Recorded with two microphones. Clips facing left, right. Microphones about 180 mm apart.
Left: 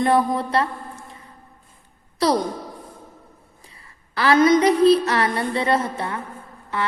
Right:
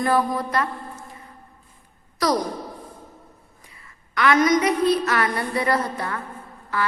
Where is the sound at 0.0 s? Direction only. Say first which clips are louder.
Left 2 dB; 25° left (ahead or behind).